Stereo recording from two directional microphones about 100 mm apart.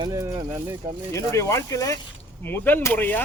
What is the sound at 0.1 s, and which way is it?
Speech, 35° right (ahead or behind).